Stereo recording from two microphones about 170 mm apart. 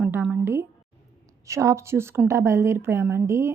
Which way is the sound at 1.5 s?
15° right (ahead or behind).